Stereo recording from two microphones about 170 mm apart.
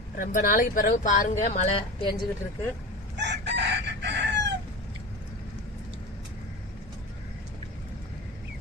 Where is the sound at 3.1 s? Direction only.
90° right.